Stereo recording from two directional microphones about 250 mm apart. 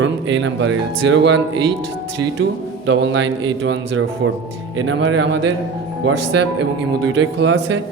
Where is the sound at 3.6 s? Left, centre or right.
Right.